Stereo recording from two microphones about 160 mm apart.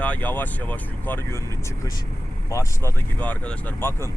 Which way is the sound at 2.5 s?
20° left (ahead or behind).